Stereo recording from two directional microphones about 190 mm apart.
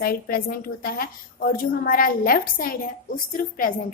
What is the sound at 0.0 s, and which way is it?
A woman's voice, 50° left (ahead or behind).